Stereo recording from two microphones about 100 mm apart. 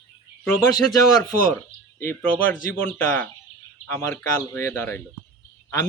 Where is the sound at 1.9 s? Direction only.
15° left (ahead or behind).